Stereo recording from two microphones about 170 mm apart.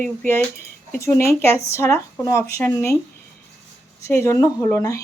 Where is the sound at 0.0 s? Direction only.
10° left (ahead or behind).